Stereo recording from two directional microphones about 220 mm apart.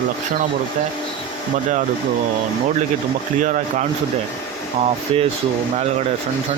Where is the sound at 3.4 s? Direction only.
35° right (ahead or behind).